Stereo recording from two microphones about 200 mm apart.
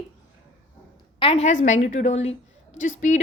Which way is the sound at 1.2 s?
30° left (ahead or behind).